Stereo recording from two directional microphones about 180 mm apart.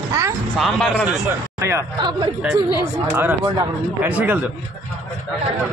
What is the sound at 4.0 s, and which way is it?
Speech, 10° right (ahead or behind).